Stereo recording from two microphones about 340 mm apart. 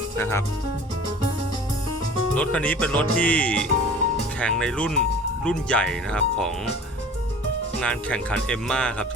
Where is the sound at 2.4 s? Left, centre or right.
Centre.